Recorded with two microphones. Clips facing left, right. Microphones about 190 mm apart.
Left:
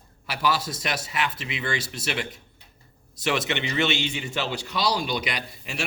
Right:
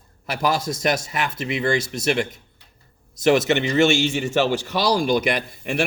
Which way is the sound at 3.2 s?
45° right (ahead or behind).